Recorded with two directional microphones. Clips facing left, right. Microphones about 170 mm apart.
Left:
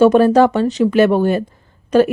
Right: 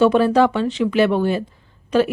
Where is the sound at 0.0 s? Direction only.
45° left (ahead or behind).